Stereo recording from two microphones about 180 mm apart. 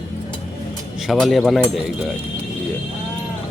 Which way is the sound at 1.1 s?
Centre (ahead or behind).